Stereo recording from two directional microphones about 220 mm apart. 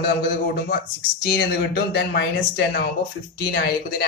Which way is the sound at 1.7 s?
50° left (ahead or behind).